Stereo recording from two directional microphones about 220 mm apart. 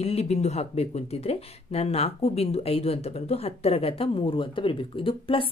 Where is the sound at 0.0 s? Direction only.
30° left (ahead or behind).